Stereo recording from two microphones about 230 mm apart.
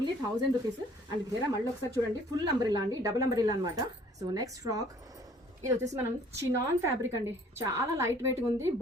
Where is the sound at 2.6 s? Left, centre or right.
Centre.